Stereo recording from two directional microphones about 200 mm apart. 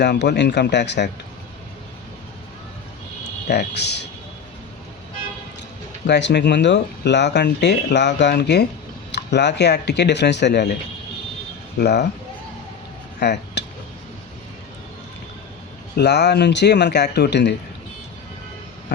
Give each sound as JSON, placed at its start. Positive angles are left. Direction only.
{"t": 0.0, "sound": "speech", "side_deg": 60}
{"t": 3.5, "sound": "speech", "side_deg": 55}
{"t": 6.1, "sound": "speech", "side_deg": 60}
{"t": 11.8, "sound": "speech", "side_deg": 55}
{"t": 13.1, "sound": "a sound", "side_deg": 55}
{"t": 16.0, "sound": "speech", "side_deg": 55}